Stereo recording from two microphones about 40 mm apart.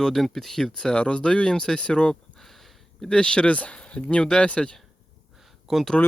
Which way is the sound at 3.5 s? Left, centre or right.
Left.